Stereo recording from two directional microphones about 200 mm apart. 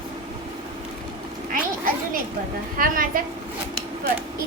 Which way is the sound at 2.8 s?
45° right (ahead or behind).